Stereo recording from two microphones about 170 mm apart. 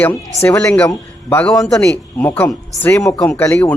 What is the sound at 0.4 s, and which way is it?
A man's voice, 15° left (ahead or behind).